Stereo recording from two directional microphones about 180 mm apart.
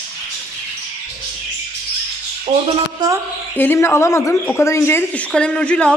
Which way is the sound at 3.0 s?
20° right (ahead or behind).